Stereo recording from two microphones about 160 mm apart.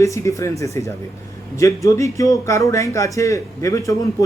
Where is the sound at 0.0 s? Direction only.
20° left (ahead or behind).